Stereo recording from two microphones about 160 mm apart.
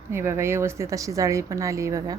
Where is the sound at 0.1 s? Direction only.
15° right (ahead or behind).